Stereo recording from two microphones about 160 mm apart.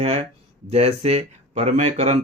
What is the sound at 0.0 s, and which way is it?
Speech, 45° right (ahead or behind).